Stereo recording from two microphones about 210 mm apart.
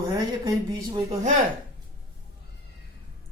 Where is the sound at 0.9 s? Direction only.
30° right (ahead or behind).